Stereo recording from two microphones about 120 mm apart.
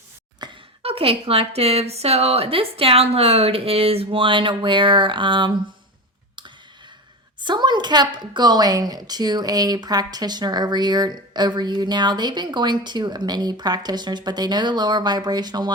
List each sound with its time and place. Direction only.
0.8 s a woman's voice: 50° right (ahead or behind)
7.4 s a woman's voice: 40° right (ahead or behind)